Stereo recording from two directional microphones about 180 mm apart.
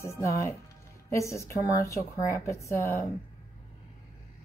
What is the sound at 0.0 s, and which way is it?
A woman's voice, 15° left (ahead or behind).